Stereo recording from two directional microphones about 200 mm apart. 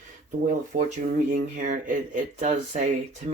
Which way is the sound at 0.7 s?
40° right (ahead or behind).